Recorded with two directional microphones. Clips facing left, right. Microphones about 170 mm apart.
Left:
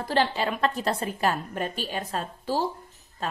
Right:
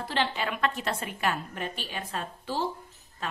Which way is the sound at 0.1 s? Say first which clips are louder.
Left 5 dB; 40° left (ahead or behind).